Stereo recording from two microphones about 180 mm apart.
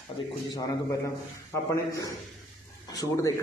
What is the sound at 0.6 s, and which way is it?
Speech, 15° left (ahead or behind).